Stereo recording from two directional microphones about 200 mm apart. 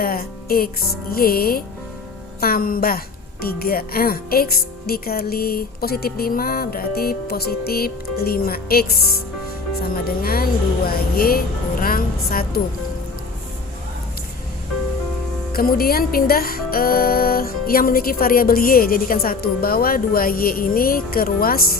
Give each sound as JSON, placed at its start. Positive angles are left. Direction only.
{"t": 0.0, "sound": "music", "side_deg": 50}
{"t": 1.1, "sound": "speech", "side_deg": 50}
{"t": 15.5, "sound": "speech", "side_deg": 50}